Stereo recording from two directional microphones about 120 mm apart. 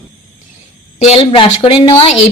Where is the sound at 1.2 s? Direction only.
50° left (ahead or behind).